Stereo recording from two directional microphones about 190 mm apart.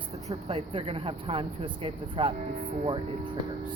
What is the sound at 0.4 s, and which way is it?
Speech, 30° right (ahead or behind).